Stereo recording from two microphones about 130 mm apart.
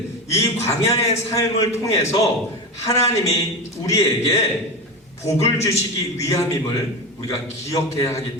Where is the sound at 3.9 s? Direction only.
25° left (ahead or behind).